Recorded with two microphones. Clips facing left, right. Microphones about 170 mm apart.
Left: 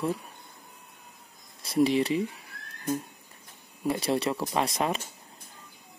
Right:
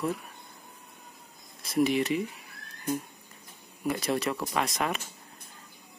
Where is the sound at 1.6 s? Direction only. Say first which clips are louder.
Left 2 dB; 30° left (ahead or behind).